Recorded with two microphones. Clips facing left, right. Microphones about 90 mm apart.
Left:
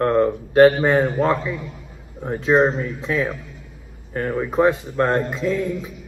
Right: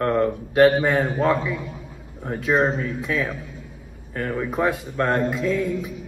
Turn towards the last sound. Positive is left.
turn(degrees=25)  # may be behind; listen again after turning